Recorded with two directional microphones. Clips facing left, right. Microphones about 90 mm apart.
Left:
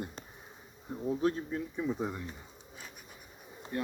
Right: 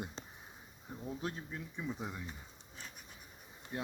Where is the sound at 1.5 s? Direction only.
30° left (ahead or behind).